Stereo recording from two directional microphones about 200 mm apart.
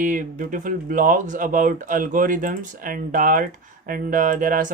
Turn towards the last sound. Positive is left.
turn(degrees=-40)  # may be behind; listen again after turning